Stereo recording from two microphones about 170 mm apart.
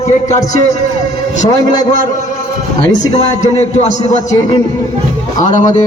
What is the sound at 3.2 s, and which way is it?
Speech, 40° left (ahead or behind).